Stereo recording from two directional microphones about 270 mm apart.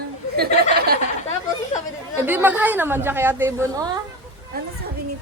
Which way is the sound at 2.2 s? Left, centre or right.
Centre.